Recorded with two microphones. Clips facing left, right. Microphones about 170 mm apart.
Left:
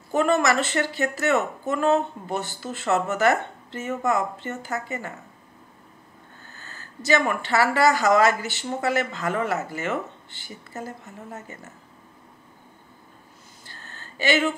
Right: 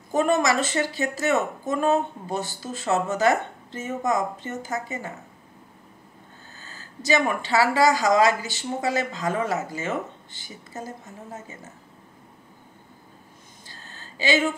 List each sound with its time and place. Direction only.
0.1 s a woman's voice: 15° right (ahead or behind)
6.5 s a woman's voice: 15° right (ahead or behind)
13.7 s a sound: 15° right (ahead or behind)